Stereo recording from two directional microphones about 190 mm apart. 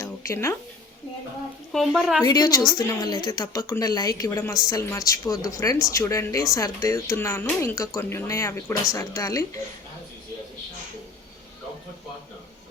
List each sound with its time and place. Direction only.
0.0 s music: 15° left (ahead or behind)
1.7 s speech: centre (ahead or behind)
2.2 s a woman's voice: 20° left (ahead or behind)